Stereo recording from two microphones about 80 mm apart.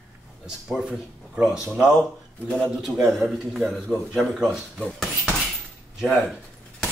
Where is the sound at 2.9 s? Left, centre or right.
Centre.